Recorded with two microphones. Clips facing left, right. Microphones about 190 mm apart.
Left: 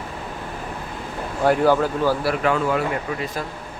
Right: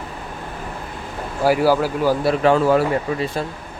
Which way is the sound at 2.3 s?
30° right (ahead or behind).